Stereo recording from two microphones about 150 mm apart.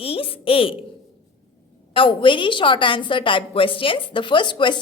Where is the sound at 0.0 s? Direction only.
40° left (ahead or behind).